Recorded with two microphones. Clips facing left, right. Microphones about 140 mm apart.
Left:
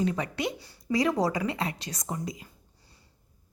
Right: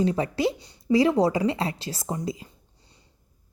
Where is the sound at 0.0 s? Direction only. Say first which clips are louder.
Right 5 dB; 30° right (ahead or behind).